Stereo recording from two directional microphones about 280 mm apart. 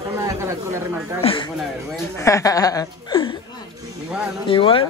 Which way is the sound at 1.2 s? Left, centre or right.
Centre.